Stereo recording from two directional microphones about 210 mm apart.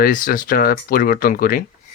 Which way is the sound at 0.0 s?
40° left (ahead or behind).